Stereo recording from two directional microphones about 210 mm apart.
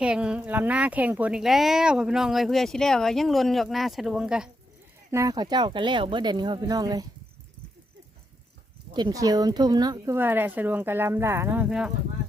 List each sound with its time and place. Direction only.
0.0 s speech: 5° right (ahead or behind)
5.1 s speech: 15° right (ahead or behind)
8.9 s speech: 20° right (ahead or behind)